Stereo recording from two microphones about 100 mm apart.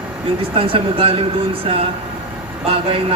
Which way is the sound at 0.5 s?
65° right (ahead or behind).